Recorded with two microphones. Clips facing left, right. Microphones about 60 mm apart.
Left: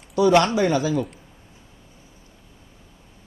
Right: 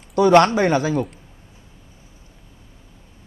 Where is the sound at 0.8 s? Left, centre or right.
Right.